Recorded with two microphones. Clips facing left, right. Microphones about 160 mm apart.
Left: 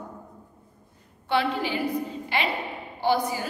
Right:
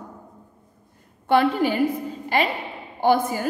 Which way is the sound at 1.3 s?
50° right (ahead or behind).